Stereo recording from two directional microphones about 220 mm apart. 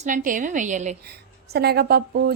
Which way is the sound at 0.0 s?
35° right (ahead or behind).